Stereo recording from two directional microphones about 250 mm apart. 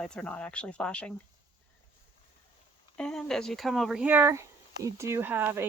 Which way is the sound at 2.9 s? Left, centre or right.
Centre.